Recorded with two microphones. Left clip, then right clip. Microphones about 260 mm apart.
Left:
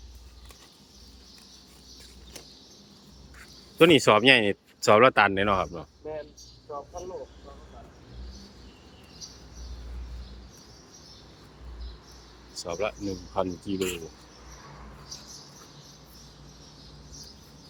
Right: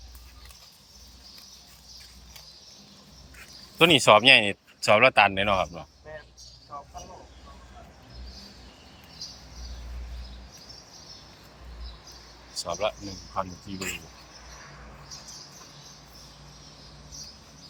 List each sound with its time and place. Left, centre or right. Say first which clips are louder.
3.8 s speech: right 1 dB; centre
12.5 s speech: right 2 dB; centre
13.4 s speech: left 2 dB; left
13.7 s speech: left 3 dB; centre